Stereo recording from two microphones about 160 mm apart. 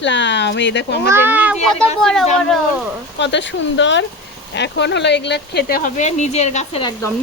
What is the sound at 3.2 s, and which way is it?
Speech, 90° left.